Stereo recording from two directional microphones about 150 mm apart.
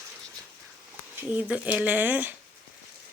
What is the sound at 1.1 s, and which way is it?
Speech, 10° right (ahead or behind).